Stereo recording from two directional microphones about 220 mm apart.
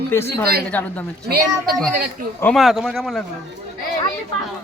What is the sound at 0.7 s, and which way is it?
Speech, 5° left (ahead or behind).